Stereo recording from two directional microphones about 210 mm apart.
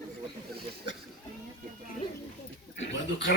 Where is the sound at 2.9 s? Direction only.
60° left (ahead or behind).